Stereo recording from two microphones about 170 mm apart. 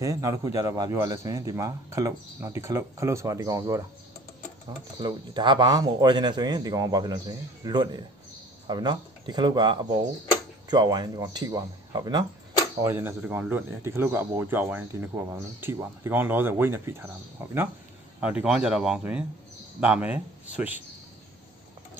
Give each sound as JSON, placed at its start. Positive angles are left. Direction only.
{"t": 0.0, "sound": "speech", "side_deg": -20}
{"t": 12.8, "sound": "speech", "side_deg": -15}